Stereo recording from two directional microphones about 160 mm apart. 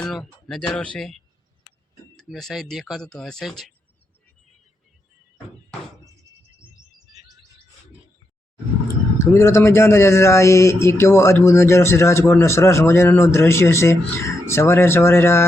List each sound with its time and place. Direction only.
0.0 s a sound: 5° left (ahead or behind)
0.9 s speech: centre (ahead or behind)
9.1 s speech: 15° left (ahead or behind)